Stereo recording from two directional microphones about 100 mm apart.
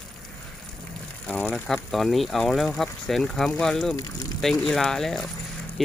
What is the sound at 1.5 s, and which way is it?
Speech, centre (ahead or behind).